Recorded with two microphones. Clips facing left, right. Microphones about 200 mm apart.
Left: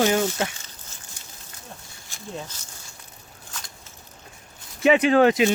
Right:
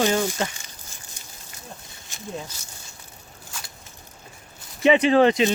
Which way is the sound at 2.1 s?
20° right (ahead or behind).